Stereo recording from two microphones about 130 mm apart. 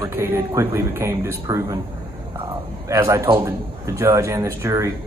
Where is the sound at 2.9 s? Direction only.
25° right (ahead or behind).